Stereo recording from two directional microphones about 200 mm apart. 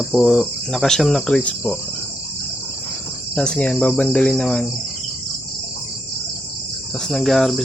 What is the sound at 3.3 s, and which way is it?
Cricket, 5° left (ahead or behind).